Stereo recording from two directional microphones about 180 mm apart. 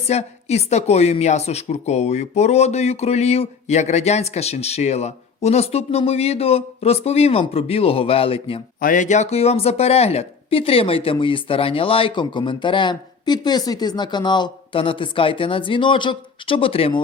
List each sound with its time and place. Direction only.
0.1 s a woman's voice: 35° left (ahead or behind)
8.8 s speech: 45° left (ahead or behind); by 17.0 s 30° left (ahead or behind)